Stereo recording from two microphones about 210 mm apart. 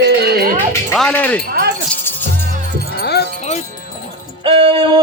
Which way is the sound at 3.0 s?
50° left (ahead or behind).